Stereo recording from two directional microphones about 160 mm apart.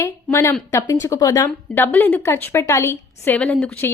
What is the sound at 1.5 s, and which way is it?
A woman's voice, 10° left (ahead or behind).